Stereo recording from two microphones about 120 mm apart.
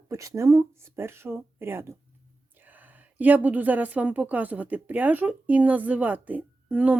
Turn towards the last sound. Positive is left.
turn(degrees=-10)  # may be behind; listen again after turning